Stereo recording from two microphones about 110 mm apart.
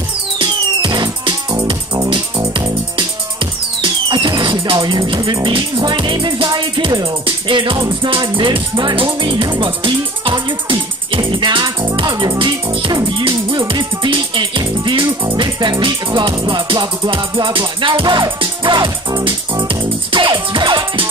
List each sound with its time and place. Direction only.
0.4 s music: 45° right (ahead or behind)
3.8 s music: 45° right (ahead or behind)